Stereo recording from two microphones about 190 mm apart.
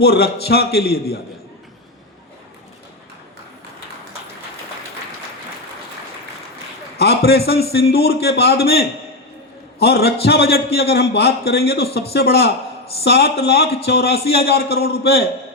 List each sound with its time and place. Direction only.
0.0 s a man's voice: 60° left (ahead or behind)
6.9 s a man's voice: 55° left (ahead or behind)